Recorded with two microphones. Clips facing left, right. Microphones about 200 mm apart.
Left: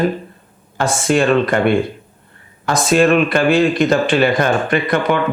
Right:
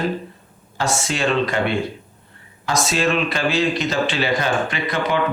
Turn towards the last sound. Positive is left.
turn(degrees=55)  # may be behind; listen again after turning